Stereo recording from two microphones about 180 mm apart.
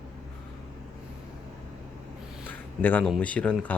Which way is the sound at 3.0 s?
5° left (ahead or behind).